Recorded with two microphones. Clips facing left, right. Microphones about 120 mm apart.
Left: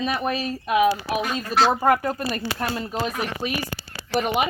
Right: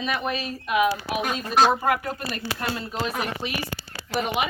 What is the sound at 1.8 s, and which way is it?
Speech, 35° left (ahead or behind).